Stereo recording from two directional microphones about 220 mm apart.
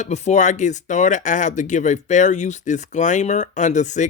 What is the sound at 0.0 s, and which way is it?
Speech, 30° left (ahead or behind).